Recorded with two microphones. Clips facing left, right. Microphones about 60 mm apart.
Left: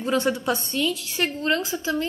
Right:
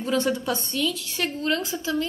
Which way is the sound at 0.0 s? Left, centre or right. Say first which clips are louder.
Left 1 dB; left.